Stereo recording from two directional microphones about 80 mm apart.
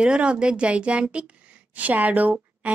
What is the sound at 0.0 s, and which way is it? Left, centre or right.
A woman's voice, centre.